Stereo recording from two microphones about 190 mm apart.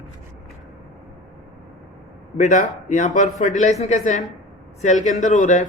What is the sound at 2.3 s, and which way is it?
A man's voice, 40° left (ahead or behind).